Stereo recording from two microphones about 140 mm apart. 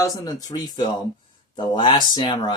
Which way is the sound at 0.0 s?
25° left (ahead or behind).